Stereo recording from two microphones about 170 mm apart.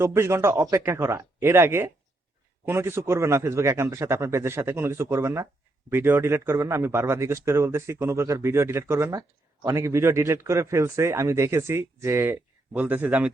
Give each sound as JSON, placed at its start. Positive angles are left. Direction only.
{"t": 0.0, "sound": "speech", "side_deg": -15}